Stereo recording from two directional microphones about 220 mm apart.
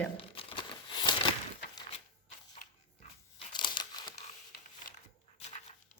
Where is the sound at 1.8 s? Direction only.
25° left (ahead or behind).